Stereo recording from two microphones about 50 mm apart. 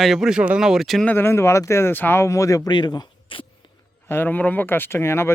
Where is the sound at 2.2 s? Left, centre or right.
Left.